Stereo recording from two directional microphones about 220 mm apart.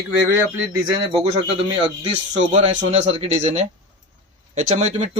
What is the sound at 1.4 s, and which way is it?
Speech, 25° right (ahead or behind).